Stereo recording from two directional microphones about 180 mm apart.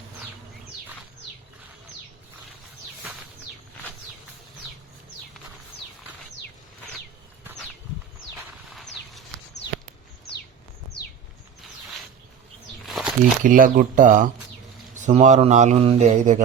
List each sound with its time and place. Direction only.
8.7 s a sound: centre (ahead or behind)
12.8 s walk: centre (ahead or behind)
13.4 s speech: 50° right (ahead or behind)